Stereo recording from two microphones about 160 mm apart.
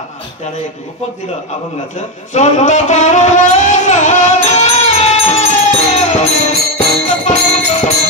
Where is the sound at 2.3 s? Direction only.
50° left (ahead or behind).